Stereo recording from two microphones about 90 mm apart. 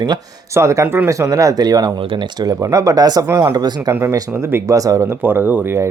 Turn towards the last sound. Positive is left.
turn(degrees=-25)  # may be behind; listen again after turning